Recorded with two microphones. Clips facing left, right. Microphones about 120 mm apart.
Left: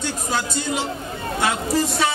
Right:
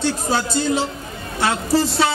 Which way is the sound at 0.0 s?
35° right (ahead or behind).